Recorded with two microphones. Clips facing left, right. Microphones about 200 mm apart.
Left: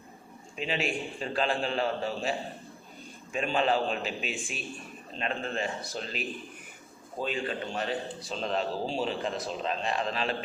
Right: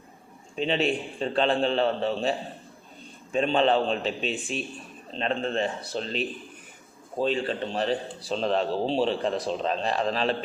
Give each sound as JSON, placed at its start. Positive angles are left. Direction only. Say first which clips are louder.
{"t": 0.5, "sound": "a man's voice", "louder": "right 6 dB", "side_deg": -35}
{"t": 3.3, "sound": "a man's voice", "louder": "right 5 dB", "side_deg": -30}